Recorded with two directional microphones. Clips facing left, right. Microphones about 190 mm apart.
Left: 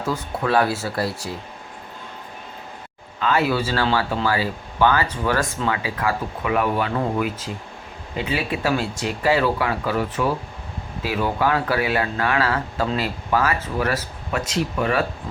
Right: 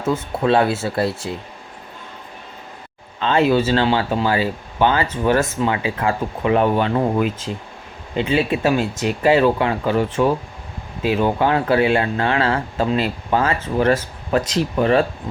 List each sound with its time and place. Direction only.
0.0 s speech: 25° right (ahead or behind)
3.2 s speech: 25° right (ahead or behind)